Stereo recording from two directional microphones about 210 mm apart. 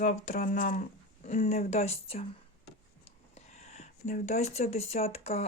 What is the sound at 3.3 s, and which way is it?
Speech, 30° left (ahead or behind).